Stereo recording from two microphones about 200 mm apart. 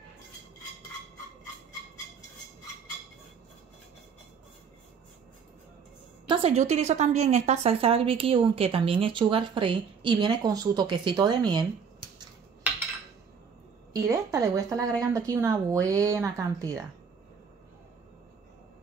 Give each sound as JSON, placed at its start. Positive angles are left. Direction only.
{"t": 6.2, "sound": "a woman's voice", "side_deg": -25}
{"t": 13.9, "sound": "speech", "side_deg": -15}